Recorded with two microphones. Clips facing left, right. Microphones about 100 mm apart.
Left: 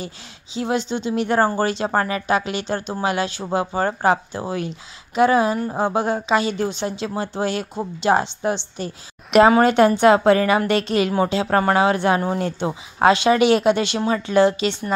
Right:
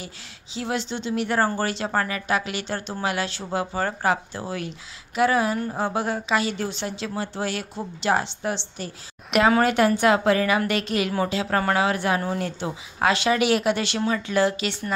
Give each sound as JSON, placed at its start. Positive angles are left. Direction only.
{"t": 0.6, "sound": "speech", "side_deg": 20}
{"t": 1.9, "sound": "a woman's voice", "side_deg": 30}